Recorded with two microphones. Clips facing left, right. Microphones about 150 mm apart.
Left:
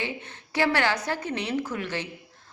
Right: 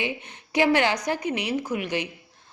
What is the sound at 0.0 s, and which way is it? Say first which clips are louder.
A woman's voice: right 3 dB; 15° right (ahead or behind).